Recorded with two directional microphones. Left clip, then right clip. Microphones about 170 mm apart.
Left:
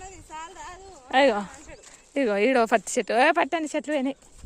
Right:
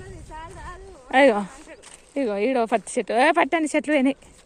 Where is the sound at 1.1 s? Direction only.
5° left (ahead or behind).